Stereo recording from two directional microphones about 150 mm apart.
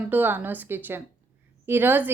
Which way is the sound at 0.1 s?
10° right (ahead or behind).